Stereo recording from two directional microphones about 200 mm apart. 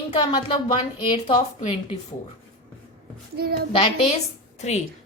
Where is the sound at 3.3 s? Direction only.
50° right (ahead or behind).